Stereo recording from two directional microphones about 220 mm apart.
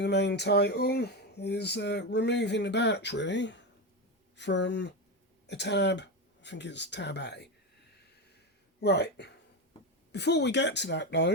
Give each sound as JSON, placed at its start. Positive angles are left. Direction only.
{"t": 0.0, "sound": "speech", "side_deg": 50}
{"t": 8.8, "sound": "speech", "side_deg": 50}